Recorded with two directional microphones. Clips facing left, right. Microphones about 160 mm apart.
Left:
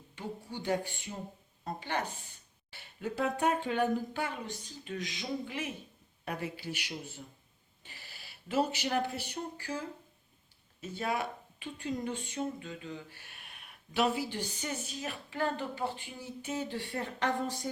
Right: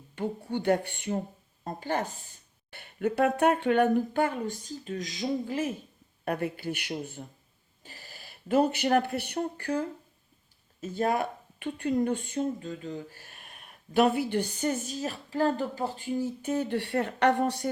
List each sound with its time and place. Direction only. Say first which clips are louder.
0.2 s speech: right 9 dB; 60° right (ahead or behind)
1.6 s speech: right 5 dB; 45° right (ahead or behind)
2.6 s speech: right 9 dB; 55° right (ahead or behind); by 5.7 s 40° right (ahead or behind)
6.2 s speech: right 7 dB; 55° right (ahead or behind)
7.9 s speech: right 5 dB; 40° right (ahead or behind); by 9.8 s 60° right (ahead or behind)
10.8 s speech: right 7 dB; 45° right (ahead or behind); by 17.7 s 70° right (ahead or behind)